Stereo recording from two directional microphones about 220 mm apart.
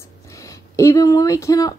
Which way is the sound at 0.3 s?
15° left (ahead or behind).